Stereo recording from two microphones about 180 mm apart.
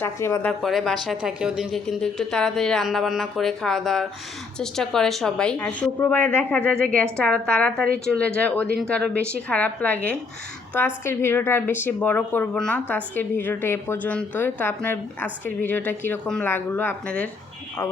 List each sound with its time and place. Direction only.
0.0 s a woman's voice: 15° left (ahead or behind)
0.6 s a woman's voice: centre (ahead or behind)